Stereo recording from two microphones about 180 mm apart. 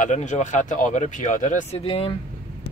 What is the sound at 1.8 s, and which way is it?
Speech, 30° left (ahead or behind).